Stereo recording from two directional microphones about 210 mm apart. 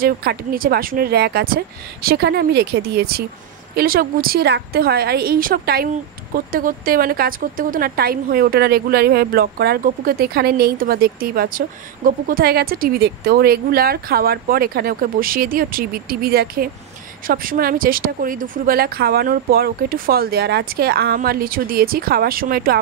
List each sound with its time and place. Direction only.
0.0 s a woman's voice: 45° right (ahead or behind)